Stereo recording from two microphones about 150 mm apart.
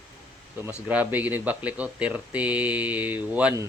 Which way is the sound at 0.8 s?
10° right (ahead or behind).